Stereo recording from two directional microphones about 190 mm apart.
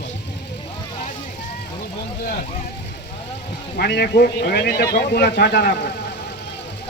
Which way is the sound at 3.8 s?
60° left (ahead or behind).